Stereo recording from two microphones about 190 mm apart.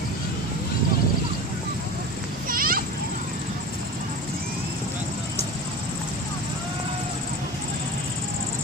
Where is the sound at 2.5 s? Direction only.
50° right (ahead or behind).